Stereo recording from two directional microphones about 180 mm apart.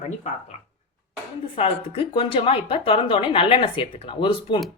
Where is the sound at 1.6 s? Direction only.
30° left (ahead or behind).